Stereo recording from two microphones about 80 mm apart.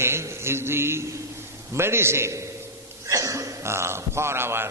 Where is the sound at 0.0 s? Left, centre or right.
Right.